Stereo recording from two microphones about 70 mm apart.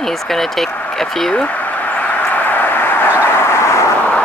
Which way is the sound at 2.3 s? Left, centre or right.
Left.